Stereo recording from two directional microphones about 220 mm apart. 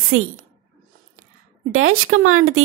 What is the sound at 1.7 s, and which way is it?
Speech, 65° right (ahead or behind).